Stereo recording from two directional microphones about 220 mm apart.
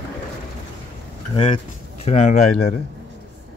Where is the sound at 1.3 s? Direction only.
25° left (ahead or behind).